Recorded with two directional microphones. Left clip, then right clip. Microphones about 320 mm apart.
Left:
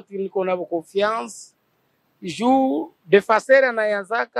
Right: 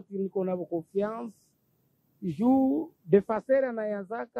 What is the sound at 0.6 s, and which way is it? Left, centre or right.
Speech, left.